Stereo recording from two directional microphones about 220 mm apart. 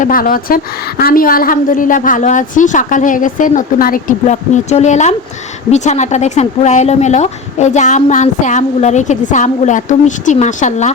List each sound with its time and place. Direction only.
0.0 s speech: 40° left (ahead or behind)